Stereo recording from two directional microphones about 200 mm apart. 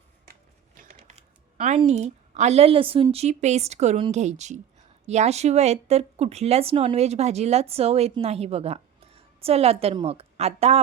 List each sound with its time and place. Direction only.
0.8 s typing: 35° right (ahead or behind)
1.8 s speech: 35° right (ahead or behind)